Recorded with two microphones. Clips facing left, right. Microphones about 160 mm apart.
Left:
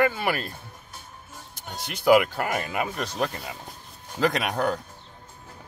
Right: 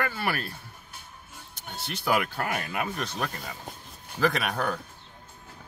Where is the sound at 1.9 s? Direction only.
10° left (ahead or behind).